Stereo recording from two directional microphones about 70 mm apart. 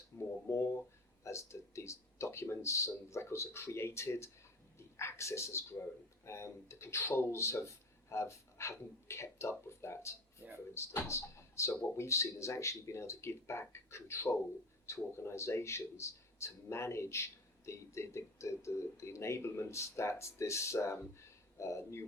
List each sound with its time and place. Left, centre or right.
0.4 s speech: left